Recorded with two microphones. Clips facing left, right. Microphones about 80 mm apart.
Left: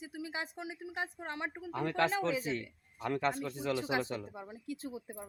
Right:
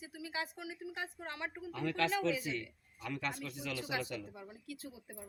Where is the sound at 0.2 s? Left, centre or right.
Left.